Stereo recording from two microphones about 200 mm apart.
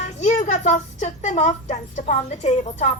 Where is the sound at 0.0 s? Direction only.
35° left (ahead or behind).